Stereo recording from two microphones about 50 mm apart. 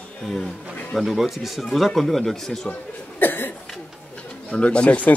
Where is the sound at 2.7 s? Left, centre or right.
Left.